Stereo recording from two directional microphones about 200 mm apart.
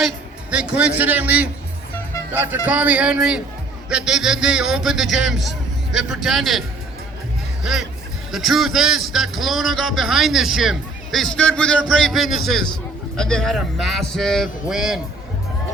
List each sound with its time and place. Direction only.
0.5 s speech: 5° right (ahead or behind)